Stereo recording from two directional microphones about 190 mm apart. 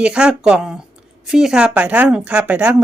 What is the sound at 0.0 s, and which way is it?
Speech, 5° right (ahead or behind).